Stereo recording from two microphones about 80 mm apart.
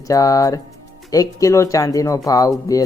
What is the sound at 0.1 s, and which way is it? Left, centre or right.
Speech, left.